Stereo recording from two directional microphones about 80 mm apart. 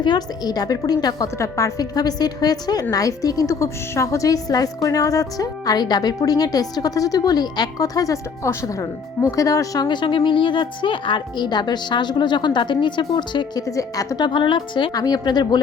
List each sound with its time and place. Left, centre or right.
0.0 s a woman's voice: left
1.4 s a woman's voice: left
9.8 s a woman's voice: left
13.6 s a woman's voice: left
14.3 s a woman's voice: left
14.9 s a woman's voice: left